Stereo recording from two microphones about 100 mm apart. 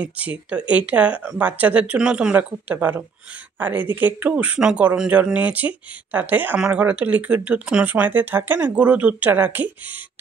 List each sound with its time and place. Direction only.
0.0 s speech: 15° right (ahead or behind)